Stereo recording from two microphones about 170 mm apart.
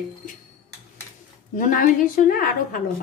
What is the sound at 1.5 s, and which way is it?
A woman's voice, 50° left (ahead or behind).